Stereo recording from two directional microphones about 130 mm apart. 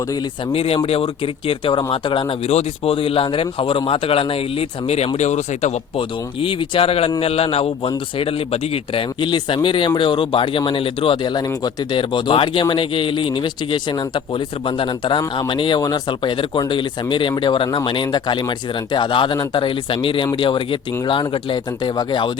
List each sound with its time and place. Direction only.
0.5 s speech: 50° left (ahead or behind)
2.5 s speech: 50° left (ahead or behind)
6.0 s speech: 40° left (ahead or behind)